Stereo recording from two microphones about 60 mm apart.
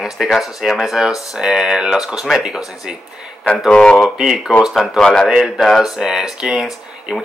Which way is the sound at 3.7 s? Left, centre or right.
Centre.